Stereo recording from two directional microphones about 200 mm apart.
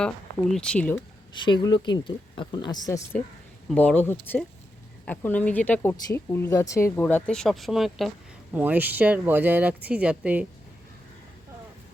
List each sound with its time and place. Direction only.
0.5 s speech: 5° left (ahead or behind)
1.3 s speech: 20° left (ahead or behind)
3.7 s speech: 5° left (ahead or behind)